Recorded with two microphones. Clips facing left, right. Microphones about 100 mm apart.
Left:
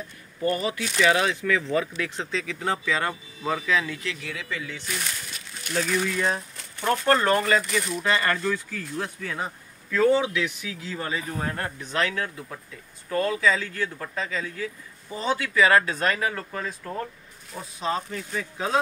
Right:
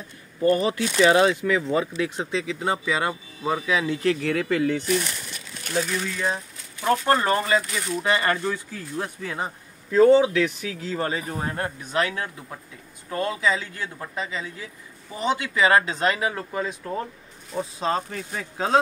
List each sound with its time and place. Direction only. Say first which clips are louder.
0.4 s speech: right 5 dB; 30° right (ahead or behind)
1.3 s speech: right 2 dB; 20° right (ahead or behind)
4.0 s speech: right 11 dB; 45° right (ahead or behind)
5.9 s speech: left 2 dB; 5° right (ahead or behind)
6.8 s speech: right 1 dB; 15° right (ahead or behind); by 11.3 s 35° right (ahead or behind)
11.3 s speech: right 2 dB; 20° right (ahead or behind)
17.6 s speech: right 3 dB; 35° right (ahead or behind)